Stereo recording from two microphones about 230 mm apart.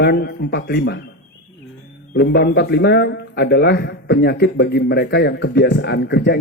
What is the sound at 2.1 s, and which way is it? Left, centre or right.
A man's voice, left.